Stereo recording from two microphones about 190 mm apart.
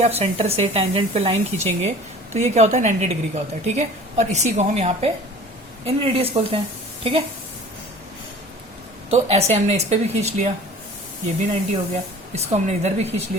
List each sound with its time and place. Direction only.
0.0 s a woman's voice: 35° right (ahead or behind)
9.0 s a woman's voice: 35° right (ahead or behind)
12.3 s a woman's voice: 35° right (ahead or behind)